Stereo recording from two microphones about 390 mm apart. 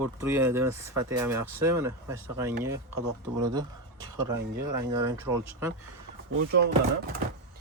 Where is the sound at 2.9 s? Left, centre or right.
Right.